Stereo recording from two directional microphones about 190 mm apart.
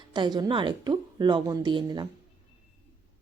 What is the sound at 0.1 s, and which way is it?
Speech, 25° right (ahead or behind).